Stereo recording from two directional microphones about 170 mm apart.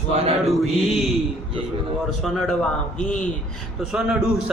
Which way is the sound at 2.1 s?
Centre (ahead or behind).